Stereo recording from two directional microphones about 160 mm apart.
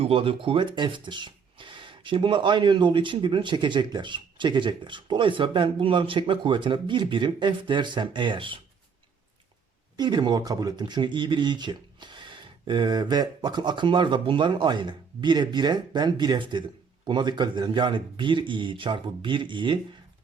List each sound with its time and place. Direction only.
0.0 s speech: 35° right (ahead or behind)
10.0 s speech: 25° right (ahead or behind)